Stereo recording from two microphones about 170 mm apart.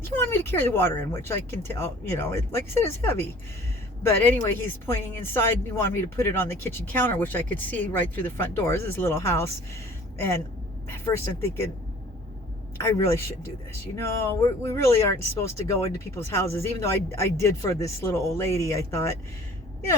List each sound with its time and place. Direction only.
0.0 s speech: 15° left (ahead or behind)
10.8 s speech: 15° left (ahead or behind)
12.7 s speech: 15° left (ahead or behind)